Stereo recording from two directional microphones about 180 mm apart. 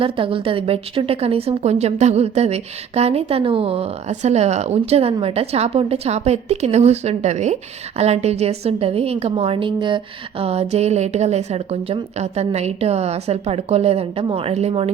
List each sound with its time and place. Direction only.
0.0 s a woman's voice: 30° right (ahead or behind)